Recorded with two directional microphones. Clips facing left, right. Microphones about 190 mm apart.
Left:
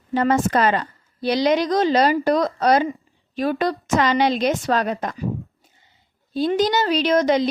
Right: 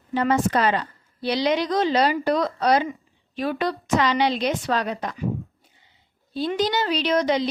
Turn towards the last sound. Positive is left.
turn(degrees=45)  # may be behind; listen again after turning